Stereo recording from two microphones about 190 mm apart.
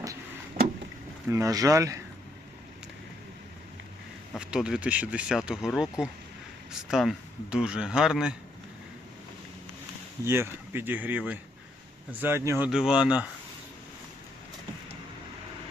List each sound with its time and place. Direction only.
0.6 s vehicle: 45° right (ahead or behind)
1.3 s speech: 15° right (ahead or behind)
4.4 s speech: 5° right (ahead or behind)
10.2 s speech: 10° right (ahead or behind)